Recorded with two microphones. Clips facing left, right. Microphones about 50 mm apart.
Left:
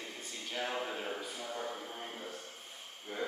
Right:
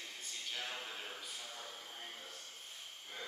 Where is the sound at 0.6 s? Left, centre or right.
Left.